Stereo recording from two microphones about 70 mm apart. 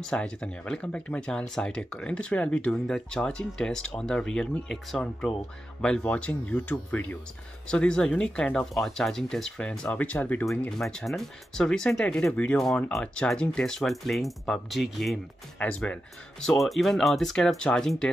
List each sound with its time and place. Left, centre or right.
0.1 s speech: centre
7.6 s speech: centre
10.8 s speech: centre
15.6 s speech: centre
16.3 s speech: centre